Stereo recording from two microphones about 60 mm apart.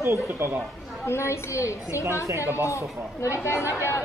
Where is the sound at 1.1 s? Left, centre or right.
Left.